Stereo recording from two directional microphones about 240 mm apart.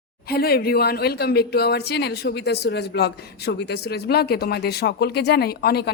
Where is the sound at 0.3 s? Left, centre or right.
Left.